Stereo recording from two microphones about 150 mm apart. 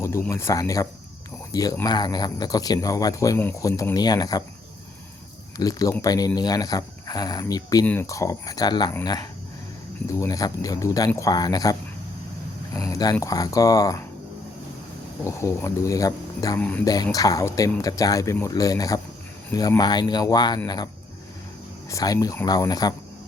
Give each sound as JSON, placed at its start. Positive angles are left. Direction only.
{"t": 0.0, "sound": "speech", "side_deg": 20}
{"t": 5.5, "sound": "speech", "side_deg": 25}
{"t": 10.1, "sound": "speech", "side_deg": 20}
{"t": 15.2, "sound": "speech", "side_deg": 20}
{"t": 16.6, "sound": "speech", "side_deg": 10}
{"t": 16.8, "sound": "speech", "side_deg": 25}